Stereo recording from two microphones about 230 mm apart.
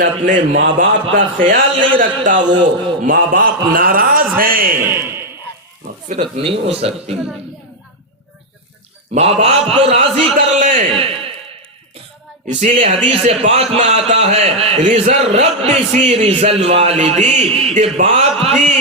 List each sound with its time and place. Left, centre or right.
0.0 s a man's voice: right
2.4 s a man's voice: centre
3.1 s a man's voice: right
4.9 s a man's voice: centre
6.1 s a man's voice: right
9.1 s a man's voice: right
10.3 s a man's voice: right
10.8 s a man's voice: right
12.5 s a man's voice: right